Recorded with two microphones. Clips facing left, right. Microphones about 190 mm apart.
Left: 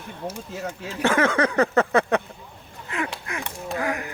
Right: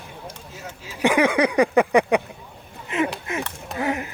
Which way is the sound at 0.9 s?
15° right (ahead or behind).